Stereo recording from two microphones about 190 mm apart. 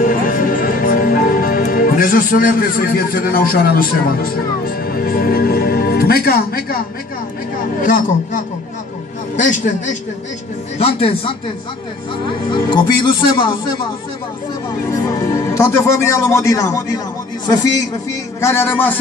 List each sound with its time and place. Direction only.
0.0 s a man's voice: 45° left (ahead or behind)
10.8 s a man's voice: 30° left (ahead or behind)
12.4 s speech: 25° left (ahead or behind)
15.4 s speech: 15° left (ahead or behind)
18.4 s speech: 10° left (ahead or behind)